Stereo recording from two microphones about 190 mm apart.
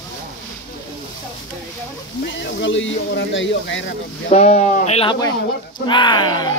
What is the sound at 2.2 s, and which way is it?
Speech, 70° left (ahead or behind).